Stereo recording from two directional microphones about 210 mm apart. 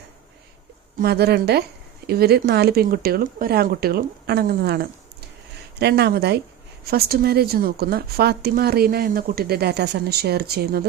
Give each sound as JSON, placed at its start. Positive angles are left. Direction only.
{"t": 1.0, "sound": "a woman's voice", "side_deg": -50}